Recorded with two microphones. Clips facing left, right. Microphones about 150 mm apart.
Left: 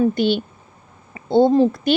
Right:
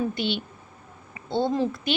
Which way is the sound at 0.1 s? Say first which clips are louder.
Left 9 dB; 40° left (ahead or behind).